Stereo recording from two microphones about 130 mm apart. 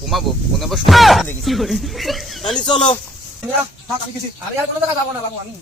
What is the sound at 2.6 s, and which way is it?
Speech, 40° left (ahead or behind).